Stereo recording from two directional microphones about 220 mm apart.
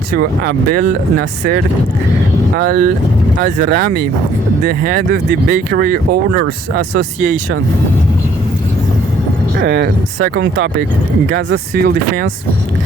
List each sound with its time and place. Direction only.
0.1 s speech: 45° right (ahead or behind)
2.6 s speech: 40° right (ahead or behind)
5.1 s speech: 55° right (ahead or behind)
9.6 s speech: 45° right (ahead or behind)
10.4 s speech: 55° right (ahead or behind)